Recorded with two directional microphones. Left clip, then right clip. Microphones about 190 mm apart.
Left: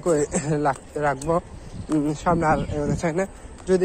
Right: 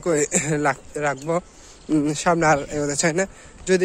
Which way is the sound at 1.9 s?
70° right (ahead or behind).